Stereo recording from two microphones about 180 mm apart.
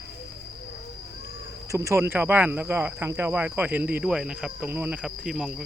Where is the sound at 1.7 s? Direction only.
15° right (ahead or behind).